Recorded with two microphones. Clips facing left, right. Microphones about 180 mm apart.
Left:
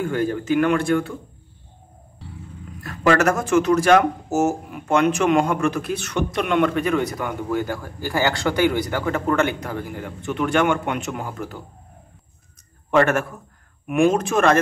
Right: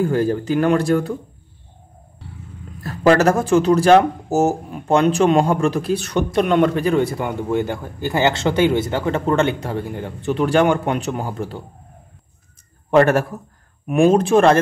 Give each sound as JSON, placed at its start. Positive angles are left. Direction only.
{"t": 0.0, "sound": "speech", "side_deg": -35}
{"t": 2.8, "sound": "speech", "side_deg": -35}
{"t": 12.9, "sound": "speech", "side_deg": -35}